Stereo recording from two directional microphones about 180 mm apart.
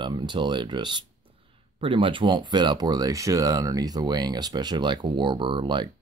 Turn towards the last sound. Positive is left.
turn(degrees=-25)  # may be behind; listen again after turning